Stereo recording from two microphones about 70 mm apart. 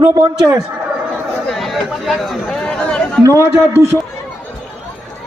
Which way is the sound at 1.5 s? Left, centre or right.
Centre.